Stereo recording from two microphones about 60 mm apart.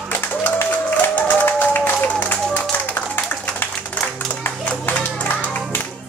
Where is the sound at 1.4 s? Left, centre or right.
Left.